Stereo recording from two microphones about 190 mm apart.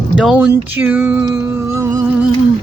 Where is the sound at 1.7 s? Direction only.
15° right (ahead or behind).